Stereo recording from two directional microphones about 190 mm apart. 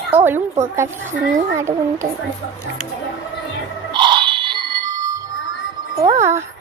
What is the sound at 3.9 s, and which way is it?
Music, 25° right (ahead or behind).